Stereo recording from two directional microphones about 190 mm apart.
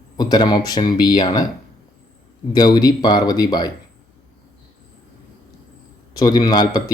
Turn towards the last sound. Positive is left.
turn(degrees=20)  # may be behind; listen again after turning